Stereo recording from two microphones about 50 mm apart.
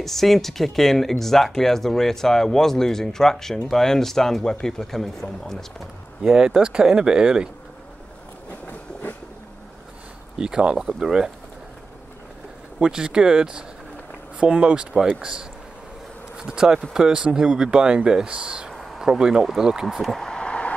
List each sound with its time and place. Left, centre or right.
0.0 s speech: centre
6.2 s speech: centre
10.3 s speech: centre
12.7 s speech: centre
16.3 s speech: centre
20.0 s speech: centre
20.2 s a sound: left